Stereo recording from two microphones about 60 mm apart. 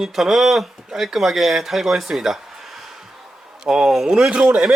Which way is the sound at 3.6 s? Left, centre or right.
Centre.